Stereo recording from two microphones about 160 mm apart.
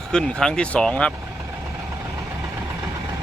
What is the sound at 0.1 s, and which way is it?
Speech, 5° left (ahead or behind).